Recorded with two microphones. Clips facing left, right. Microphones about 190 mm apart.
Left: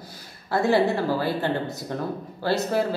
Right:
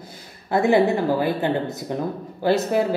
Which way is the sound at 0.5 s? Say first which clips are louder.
Right 3 dB; 20° right (ahead or behind).